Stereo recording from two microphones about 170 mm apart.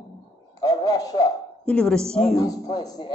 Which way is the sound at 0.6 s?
20° left (ahead or behind).